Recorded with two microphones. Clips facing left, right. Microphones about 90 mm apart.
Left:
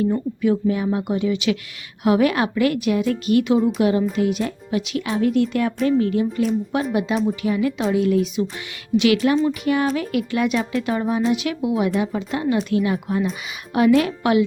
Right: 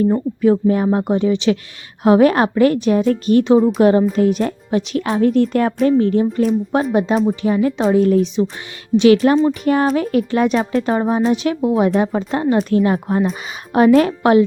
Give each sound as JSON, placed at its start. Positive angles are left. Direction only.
{"t": 0.0, "sound": "a woman's voice", "side_deg": -40}